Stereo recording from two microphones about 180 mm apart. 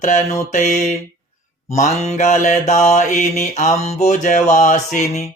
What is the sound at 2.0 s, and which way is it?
Mantra, 40° left (ahead or behind).